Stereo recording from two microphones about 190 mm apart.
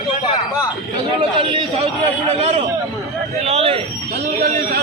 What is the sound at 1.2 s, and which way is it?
Chatter, 30° right (ahead or behind).